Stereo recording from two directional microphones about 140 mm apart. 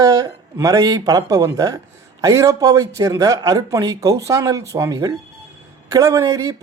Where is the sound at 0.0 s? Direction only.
25° right (ahead or behind).